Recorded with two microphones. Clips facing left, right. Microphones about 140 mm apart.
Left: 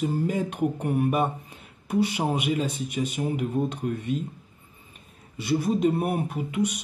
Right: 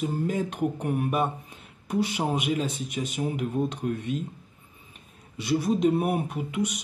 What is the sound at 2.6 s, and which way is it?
Speech, 55° left (ahead or behind).